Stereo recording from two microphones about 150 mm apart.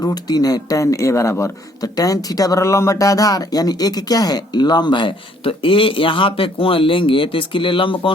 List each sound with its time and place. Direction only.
0.0 s speech: 25° left (ahead or behind)